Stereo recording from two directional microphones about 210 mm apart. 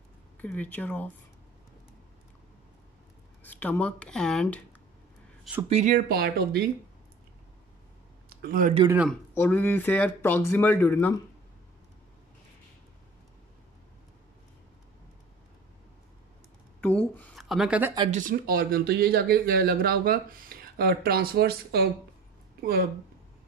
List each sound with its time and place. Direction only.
0.4 s speech: 10° left (ahead or behind)
3.4 s speech: 5° left (ahead or behind)
5.7 s speech: 30° right (ahead or behind)
6.0 s speech: 45° right (ahead or behind)
8.3 s a sound: 45° right (ahead or behind)
8.8 s speech: 5° right (ahead or behind)
9.3 s speech: 10° left (ahead or behind)
16.8 s speech: 5° left (ahead or behind)
18.1 s speech: 40° right (ahead or behind)